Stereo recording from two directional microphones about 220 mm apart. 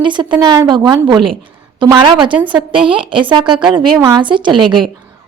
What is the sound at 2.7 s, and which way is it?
A woman's voice, 25° right (ahead or behind).